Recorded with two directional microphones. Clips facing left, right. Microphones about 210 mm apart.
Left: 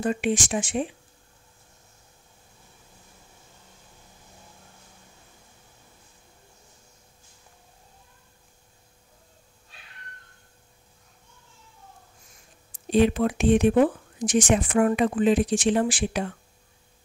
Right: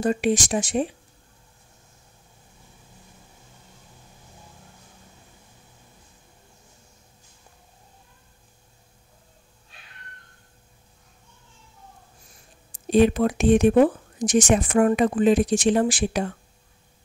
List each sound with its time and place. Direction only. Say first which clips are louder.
0.0 s speech: right 3 dB; 40° right (ahead or behind)
12.9 s speech: right 2 dB; 45° right (ahead or behind)